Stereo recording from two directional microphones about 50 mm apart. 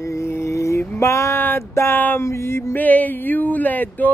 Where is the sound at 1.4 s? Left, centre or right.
Left.